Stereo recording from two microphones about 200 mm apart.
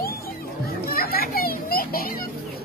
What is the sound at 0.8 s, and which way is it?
Children playing, 50° left (ahead or behind).